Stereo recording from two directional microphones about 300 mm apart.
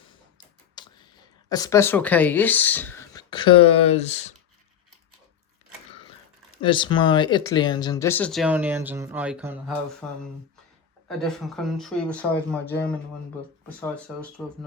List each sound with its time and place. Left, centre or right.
0.8 s computer keyboard: centre
1.5 s speech: centre
6.6 s speech: centre
13.9 s speech: centre